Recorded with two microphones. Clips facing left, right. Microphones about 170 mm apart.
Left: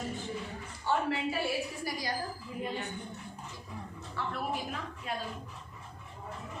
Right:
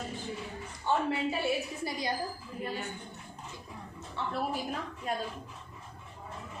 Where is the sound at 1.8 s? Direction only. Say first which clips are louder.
Right 2 dB; 25° right (ahead or behind).